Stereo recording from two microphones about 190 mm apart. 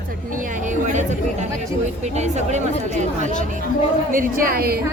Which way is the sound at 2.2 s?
35° right (ahead or behind).